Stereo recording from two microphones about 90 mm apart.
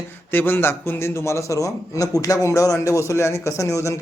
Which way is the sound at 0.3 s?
25° left (ahead or behind).